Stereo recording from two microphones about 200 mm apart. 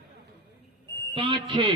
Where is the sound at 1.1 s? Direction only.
25° right (ahead or behind).